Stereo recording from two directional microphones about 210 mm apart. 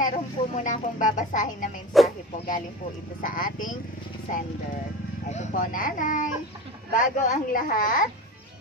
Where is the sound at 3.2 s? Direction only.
40° left (ahead or behind).